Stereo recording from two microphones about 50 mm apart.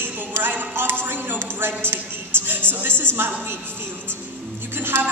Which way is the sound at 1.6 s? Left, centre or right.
Right.